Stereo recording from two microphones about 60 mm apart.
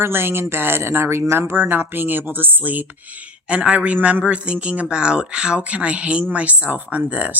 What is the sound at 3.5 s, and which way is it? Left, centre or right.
Speech, centre.